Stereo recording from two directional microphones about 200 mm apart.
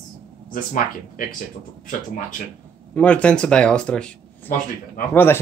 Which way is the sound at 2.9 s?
5° left (ahead or behind).